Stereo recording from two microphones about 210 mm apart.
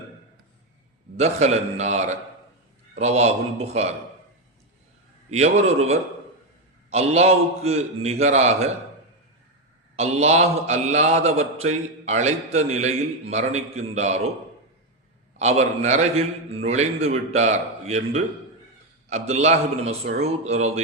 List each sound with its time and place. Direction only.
1.1 s a man's voice: 30° right (ahead or behind)
5.3 s a man's voice: 30° right (ahead or behind)
9.9 s a man's voice: 30° right (ahead or behind)
15.4 s a man's voice: 30° right (ahead or behind)